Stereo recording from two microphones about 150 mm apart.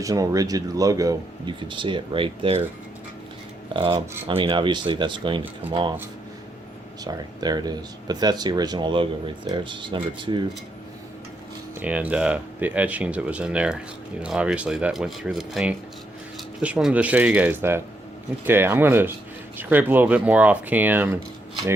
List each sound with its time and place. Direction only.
0.0 s speech: 25° right (ahead or behind); by 2.6 s 40° right (ahead or behind)
3.8 s speech: 35° right (ahead or behind)
7.0 s speech: 25° right (ahead or behind)
11.8 s speech: 10° right (ahead or behind)